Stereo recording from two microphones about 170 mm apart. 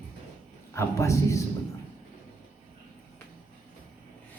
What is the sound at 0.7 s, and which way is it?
Speech, 20° left (ahead or behind).